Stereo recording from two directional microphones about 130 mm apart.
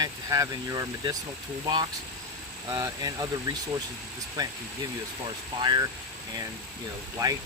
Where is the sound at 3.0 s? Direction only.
30° right (ahead or behind).